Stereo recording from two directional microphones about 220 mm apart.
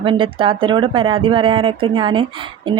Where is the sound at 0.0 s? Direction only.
20° right (ahead or behind).